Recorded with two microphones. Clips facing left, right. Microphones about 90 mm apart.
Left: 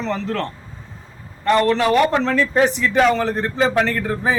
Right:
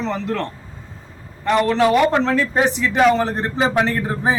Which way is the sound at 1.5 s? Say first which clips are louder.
Left 1 dB; 5° right (ahead or behind).